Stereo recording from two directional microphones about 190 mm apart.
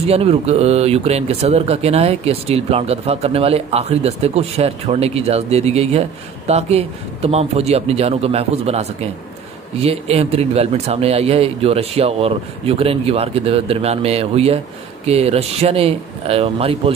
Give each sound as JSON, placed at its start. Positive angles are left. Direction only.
{"t": 0.0, "sound": "speech", "side_deg": -30}